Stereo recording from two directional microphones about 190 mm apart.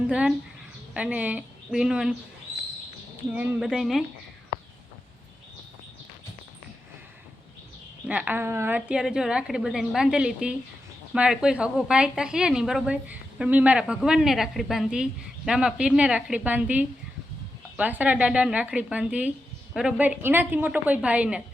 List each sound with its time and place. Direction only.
0.1 s a woman's voice: 5° right (ahead or behind)
3.3 s a woman's voice: centre (ahead or behind)
8.0 s a woman's voice: 5° right (ahead or behind)